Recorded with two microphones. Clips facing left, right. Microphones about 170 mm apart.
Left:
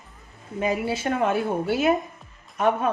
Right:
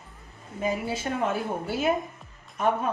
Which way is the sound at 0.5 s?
75° left (ahead or behind).